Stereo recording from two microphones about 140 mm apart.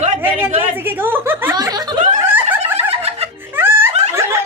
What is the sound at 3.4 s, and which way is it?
Laughter, 15° right (ahead or behind).